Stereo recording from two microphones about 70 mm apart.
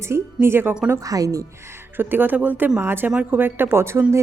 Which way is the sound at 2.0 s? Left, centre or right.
Right.